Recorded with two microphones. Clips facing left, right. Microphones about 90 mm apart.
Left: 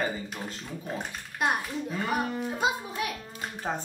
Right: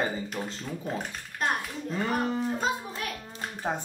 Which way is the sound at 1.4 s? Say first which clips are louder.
Left 2 dB; 10° left (ahead or behind).